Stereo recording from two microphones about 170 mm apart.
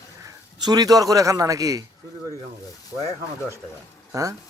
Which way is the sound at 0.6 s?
25° right (ahead or behind).